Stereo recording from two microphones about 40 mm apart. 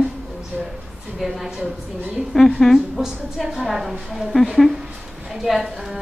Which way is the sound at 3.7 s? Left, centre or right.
Centre.